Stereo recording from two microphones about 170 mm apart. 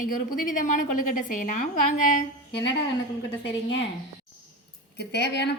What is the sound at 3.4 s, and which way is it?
Speech, 90° left.